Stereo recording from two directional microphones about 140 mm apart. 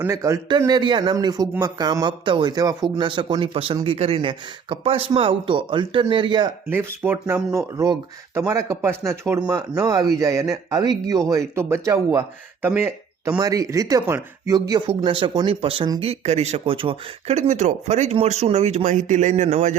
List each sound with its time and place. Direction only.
0.0 s a man's voice: 20° right (ahead or behind)
0.7 s speech: 35° right (ahead or behind)
6.7 s a man's voice: 15° right (ahead or behind); by 17.3 s 40° right (ahead or behind)
17.3 s speech: 55° right (ahead or behind)